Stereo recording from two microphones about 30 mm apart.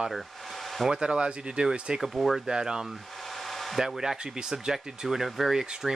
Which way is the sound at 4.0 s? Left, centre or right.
Centre.